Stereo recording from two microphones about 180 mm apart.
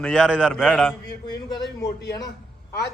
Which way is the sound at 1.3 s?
20° left (ahead or behind).